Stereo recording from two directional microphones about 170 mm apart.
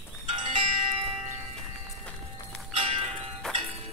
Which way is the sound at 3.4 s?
5° left (ahead or behind).